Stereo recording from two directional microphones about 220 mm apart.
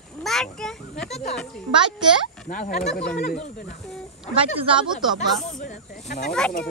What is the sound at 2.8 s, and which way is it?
Speech, 5° left (ahead or behind).